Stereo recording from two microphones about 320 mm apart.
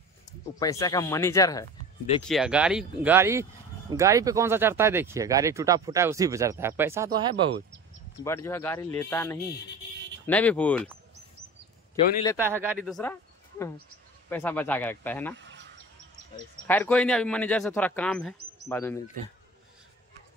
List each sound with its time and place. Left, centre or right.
0.6 s speech: centre
2.2 s speech: centre
8.2 s speech: centre
12.4 s speech: centre
12.7 s speech: centre
15.3 s a sound: right
16.6 s speech: centre